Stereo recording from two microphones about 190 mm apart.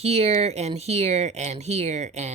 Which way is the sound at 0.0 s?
35° right (ahead or behind).